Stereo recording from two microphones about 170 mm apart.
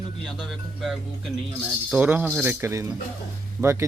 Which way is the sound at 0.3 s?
Centre (ahead or behind).